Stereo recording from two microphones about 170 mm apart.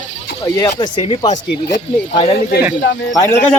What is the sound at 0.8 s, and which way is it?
Speech, 35° left (ahead or behind).